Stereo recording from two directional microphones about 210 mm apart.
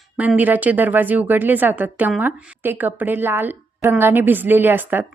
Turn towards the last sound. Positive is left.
turn(degrees=-10)  # may be behind; listen again after turning